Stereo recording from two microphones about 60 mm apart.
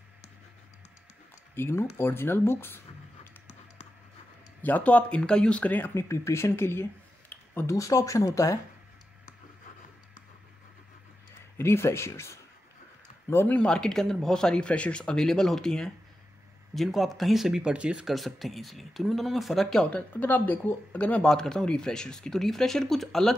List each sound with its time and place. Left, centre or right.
1.5 s speech: left
4.6 s speech: left
5.6 s speech: left
5.9 s speech: left
7.6 s speech: left
11.5 s speech: left
13.5 s speech: centre
17.6 s speech: centre
18.0 s speech: centre
19.9 s speech: left
21.2 s speech: centre